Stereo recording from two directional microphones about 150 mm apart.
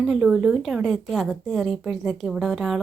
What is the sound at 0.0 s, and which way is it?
A woman's voice, centre (ahead or behind).